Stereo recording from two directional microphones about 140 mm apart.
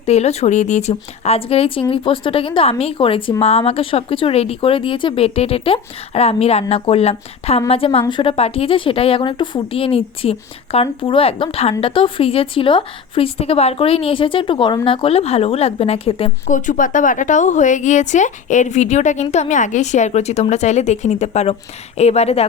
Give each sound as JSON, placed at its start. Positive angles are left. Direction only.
{"t": 0.0, "sound": "speech", "side_deg": 50}
{"t": 16.5, "sound": "a woman's voice", "side_deg": 65}